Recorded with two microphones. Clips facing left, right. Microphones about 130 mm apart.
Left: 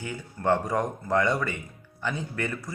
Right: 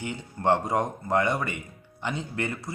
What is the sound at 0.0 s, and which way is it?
A man's voice, 25° right (ahead or behind).